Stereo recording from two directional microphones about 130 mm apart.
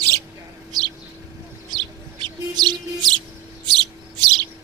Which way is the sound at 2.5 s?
30° right (ahead or behind).